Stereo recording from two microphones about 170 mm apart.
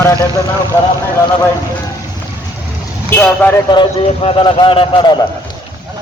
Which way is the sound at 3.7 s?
25° left (ahead or behind).